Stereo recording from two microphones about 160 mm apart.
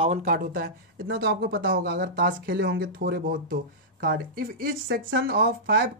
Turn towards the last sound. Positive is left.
turn(degrees=-75)  # may be behind; listen again after turning